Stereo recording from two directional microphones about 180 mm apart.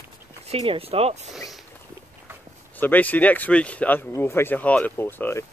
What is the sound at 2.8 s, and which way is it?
Speech, 10° left (ahead or behind).